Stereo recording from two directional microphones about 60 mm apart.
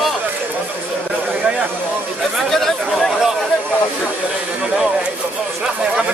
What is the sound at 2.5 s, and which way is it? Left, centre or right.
Speech, centre.